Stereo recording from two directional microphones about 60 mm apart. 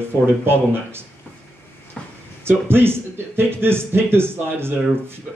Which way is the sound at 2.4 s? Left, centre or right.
Right.